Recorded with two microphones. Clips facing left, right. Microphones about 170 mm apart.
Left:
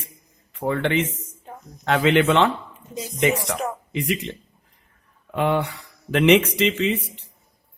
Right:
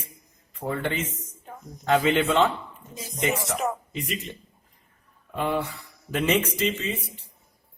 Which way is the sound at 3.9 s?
75° left (ahead or behind).